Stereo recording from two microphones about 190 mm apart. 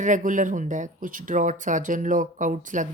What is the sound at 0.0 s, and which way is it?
Speech, 40° right (ahead or behind).